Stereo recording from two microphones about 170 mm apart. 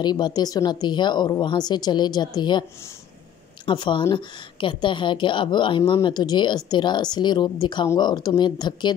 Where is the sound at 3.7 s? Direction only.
30° left (ahead or behind).